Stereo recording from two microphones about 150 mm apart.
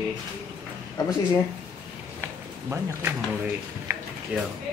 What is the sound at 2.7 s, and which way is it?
Speech, 15° right (ahead or behind).